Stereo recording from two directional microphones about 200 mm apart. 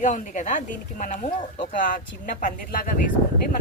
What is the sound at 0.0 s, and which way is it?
A woman's voice, 40° left (ahead or behind).